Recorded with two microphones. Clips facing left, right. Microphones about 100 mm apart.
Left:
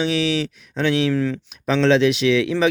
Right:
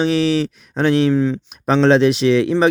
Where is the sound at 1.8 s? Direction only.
40° right (ahead or behind).